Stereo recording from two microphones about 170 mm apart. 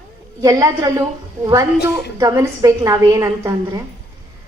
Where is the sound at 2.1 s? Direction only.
20° right (ahead or behind).